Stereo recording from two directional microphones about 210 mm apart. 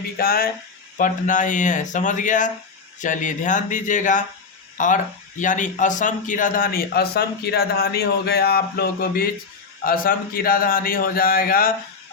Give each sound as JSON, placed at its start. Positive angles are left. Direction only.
{"t": 0.2, "sound": "speech", "side_deg": 45}